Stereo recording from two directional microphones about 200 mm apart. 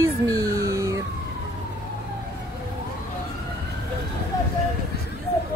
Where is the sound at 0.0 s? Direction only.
15° right (ahead or behind).